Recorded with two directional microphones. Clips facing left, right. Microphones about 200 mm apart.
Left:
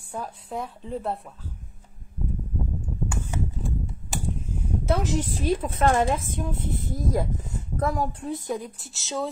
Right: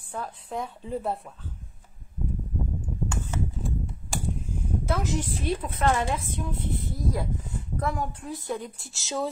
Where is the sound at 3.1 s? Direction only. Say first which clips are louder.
Left 1 dB; 10° left (ahead or behind).